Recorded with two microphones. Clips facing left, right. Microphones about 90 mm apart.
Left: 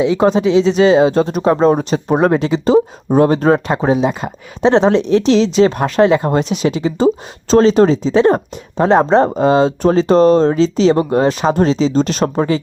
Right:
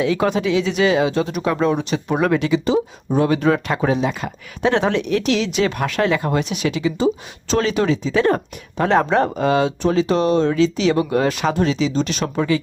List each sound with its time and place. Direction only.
0.0 s speech: 25° left (ahead or behind)